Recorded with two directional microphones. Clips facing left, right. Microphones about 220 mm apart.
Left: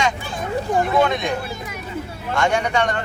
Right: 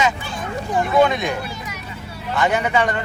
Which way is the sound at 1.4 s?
50° left (ahead or behind).